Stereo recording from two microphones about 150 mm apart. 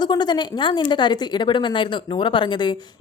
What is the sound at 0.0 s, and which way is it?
A woman's voice, 30° left (ahead or behind).